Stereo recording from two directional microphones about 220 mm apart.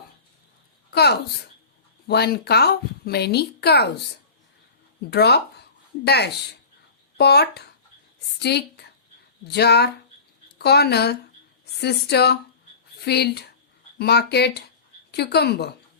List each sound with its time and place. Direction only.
0.9 s a sound: 45° left (ahead or behind)
2.0 s speech: 45° left (ahead or behind)
5.1 s speech: 50° left (ahead or behind)